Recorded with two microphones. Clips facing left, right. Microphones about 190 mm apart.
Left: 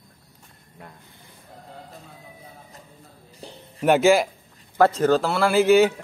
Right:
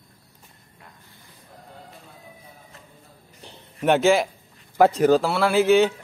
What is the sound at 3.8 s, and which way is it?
Speech, 5° left (ahead or behind).